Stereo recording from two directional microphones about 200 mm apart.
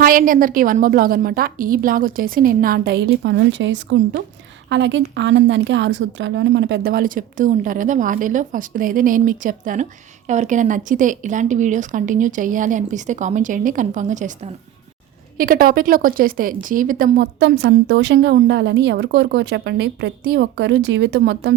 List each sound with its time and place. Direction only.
0.0 s a woman's voice: 45° right (ahead or behind)
17.4 s a woman's voice: 60° right (ahead or behind)